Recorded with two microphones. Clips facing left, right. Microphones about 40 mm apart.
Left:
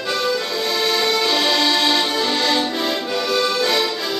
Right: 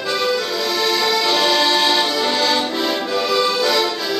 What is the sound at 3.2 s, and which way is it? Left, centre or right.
Accordion, right.